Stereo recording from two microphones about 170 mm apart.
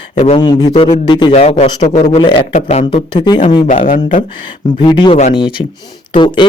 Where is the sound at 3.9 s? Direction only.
50° left (ahead or behind).